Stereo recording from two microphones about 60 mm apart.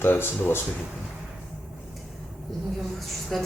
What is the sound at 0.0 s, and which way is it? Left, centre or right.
Speech, left.